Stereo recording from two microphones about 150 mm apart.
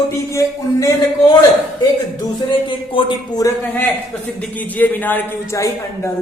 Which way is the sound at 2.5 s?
35° left (ahead or behind).